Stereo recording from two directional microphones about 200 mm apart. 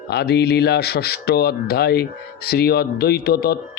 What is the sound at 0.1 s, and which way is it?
Speech, 55° left (ahead or behind).